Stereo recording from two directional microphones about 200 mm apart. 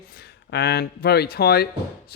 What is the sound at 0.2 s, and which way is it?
Speech, 55° left (ahead or behind).